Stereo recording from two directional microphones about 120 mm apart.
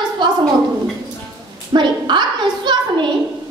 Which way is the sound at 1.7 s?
40° right (ahead or behind).